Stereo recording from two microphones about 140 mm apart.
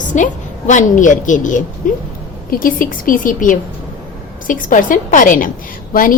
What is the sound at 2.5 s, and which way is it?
Speech, 85° left.